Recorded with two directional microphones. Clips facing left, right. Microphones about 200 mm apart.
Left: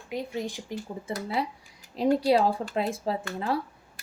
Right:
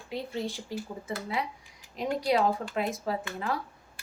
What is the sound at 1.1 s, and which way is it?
Speech, 35° left (ahead or behind).